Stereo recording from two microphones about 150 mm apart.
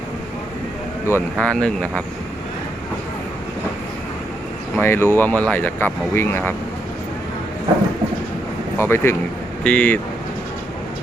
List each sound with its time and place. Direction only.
1.0 s speech: 10° left (ahead or behind)
4.8 s speech: 15° left (ahead or behind)
8.8 s speech: 15° left (ahead or behind)